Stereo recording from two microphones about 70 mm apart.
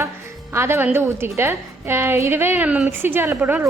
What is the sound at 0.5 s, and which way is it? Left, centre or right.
A woman's voice, right.